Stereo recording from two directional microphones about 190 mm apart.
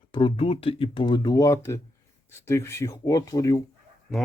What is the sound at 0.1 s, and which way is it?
Speech, 25° left (ahead or behind).